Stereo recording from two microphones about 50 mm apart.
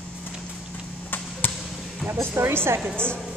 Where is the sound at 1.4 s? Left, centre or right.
Left.